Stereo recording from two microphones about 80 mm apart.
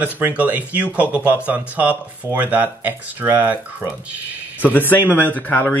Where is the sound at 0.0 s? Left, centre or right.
Right.